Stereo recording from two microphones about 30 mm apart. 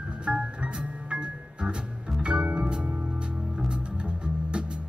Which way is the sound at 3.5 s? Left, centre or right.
Right.